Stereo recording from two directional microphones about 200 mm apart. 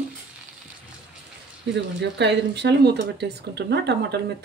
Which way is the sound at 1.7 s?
60° right (ahead or behind).